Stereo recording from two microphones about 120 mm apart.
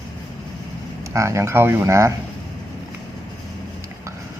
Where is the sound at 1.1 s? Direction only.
25° right (ahead or behind).